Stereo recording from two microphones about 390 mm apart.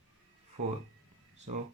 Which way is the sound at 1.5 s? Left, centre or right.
Centre.